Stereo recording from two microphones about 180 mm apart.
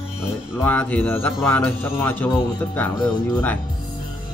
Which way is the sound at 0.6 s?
10° left (ahead or behind).